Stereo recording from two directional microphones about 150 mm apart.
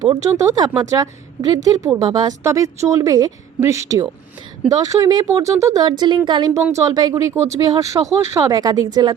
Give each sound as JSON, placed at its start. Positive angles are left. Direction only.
{"t": 0.0, "sound": "a woman's voice", "side_deg": -25}
{"t": 6.0, "sound": "a woman's voice", "side_deg": -30}